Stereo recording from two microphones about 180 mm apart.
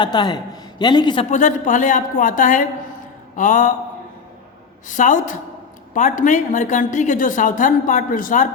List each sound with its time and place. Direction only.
0.0 s a man's voice: 25° left (ahead or behind)
1.3 s a woman's voice: 45° left (ahead or behind)
4.9 s a woman's voice: 45° left (ahead or behind)